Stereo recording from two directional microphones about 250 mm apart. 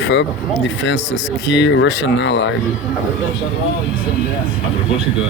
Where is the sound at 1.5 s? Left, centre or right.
Left.